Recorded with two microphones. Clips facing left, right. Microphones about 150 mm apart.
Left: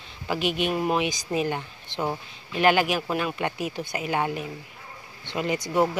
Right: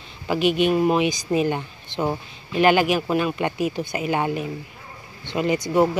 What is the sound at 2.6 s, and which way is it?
A woman's voice, 15° right (ahead or behind).